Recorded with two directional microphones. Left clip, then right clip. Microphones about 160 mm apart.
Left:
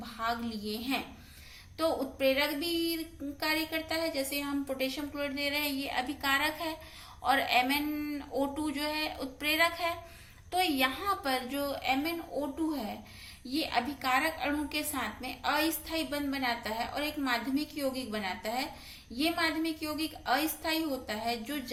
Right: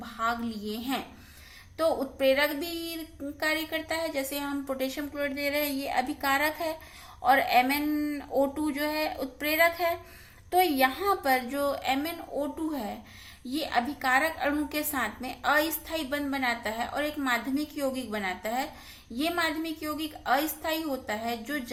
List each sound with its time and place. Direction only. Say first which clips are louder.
0.0 s a woman's voice: right 4 dB; 40° right (ahead or behind)